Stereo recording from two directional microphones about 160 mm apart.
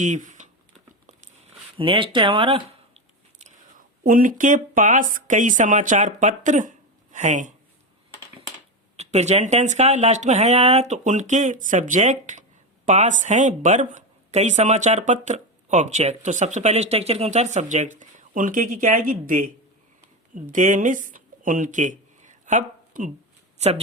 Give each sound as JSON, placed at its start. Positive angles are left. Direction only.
{"t": 0.0, "sound": "typing", "side_deg": -50}
{"t": 1.8, "sound": "speech", "side_deg": -30}
{"t": 3.3, "sound": "speech", "side_deg": -55}
{"t": 9.0, "sound": "speech", "side_deg": -45}